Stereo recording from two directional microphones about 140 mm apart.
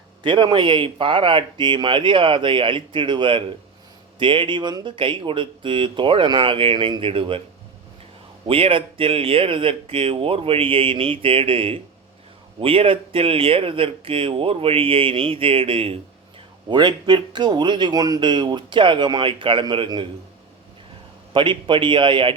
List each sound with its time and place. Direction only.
0.2 s speech: 35° right (ahead or behind)
8.4 s speech: 40° right (ahead or behind)
21.3 s speech: 35° right (ahead or behind)